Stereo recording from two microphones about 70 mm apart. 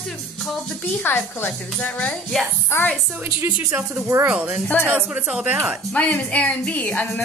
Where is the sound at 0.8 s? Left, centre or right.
Left.